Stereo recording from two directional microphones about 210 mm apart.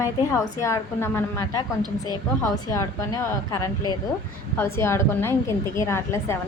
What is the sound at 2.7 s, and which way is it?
Speech, 15° left (ahead or behind).